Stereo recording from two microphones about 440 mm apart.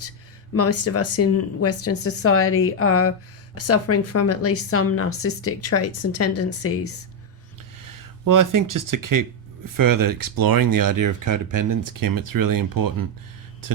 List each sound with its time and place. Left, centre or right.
0.5 s speech: left
7.8 s speech: right